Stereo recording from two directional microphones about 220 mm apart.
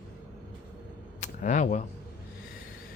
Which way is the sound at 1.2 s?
35° left (ahead or behind).